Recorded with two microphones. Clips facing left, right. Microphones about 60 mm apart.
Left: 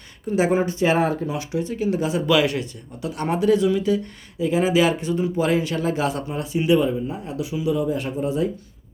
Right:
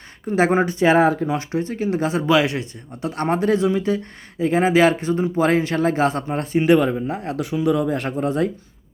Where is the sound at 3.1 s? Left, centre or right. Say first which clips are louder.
Even; right.